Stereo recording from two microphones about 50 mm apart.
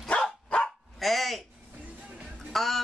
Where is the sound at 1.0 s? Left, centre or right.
Centre.